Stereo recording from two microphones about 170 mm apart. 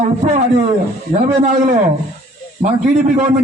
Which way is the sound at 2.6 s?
45° right (ahead or behind).